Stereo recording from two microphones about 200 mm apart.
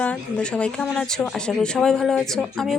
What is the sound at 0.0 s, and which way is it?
Speech, 5° left (ahead or behind).